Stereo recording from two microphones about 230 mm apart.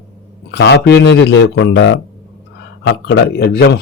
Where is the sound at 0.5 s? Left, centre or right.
Left.